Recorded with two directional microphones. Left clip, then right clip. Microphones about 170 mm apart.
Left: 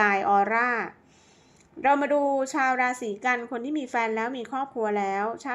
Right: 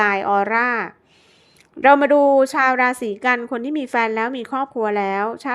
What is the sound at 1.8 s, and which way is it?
A woman's voice, 40° right (ahead or behind).